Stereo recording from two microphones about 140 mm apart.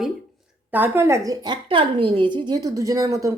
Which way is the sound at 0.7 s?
15° right (ahead or behind).